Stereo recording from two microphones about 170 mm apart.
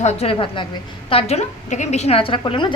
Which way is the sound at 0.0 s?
40° left (ahead or behind).